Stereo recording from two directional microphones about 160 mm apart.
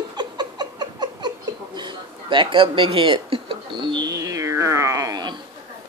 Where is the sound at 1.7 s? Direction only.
30° right (ahead or behind).